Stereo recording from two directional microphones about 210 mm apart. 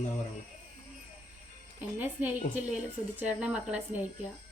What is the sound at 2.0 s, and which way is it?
A woman's voice, 10° right (ahead or behind).